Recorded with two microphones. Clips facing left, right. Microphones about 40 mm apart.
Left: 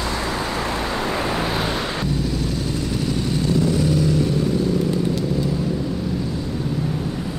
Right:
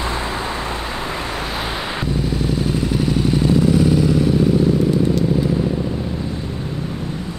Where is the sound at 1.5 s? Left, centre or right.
Centre.